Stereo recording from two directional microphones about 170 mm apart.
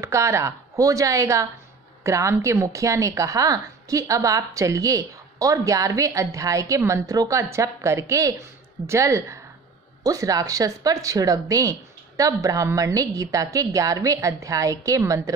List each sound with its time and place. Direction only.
0.0 s a woman's voice: 15° right (ahead or behind)